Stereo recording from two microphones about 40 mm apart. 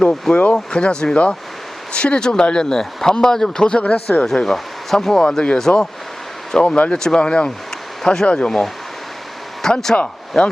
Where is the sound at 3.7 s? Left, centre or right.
Left.